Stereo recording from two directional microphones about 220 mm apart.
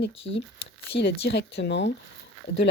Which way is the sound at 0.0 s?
55° left (ahead or behind).